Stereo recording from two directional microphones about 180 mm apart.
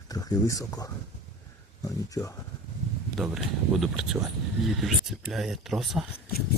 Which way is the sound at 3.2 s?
Centre (ahead or behind).